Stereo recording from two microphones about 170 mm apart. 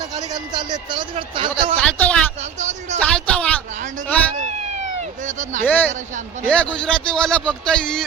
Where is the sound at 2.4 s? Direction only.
40° right (ahead or behind).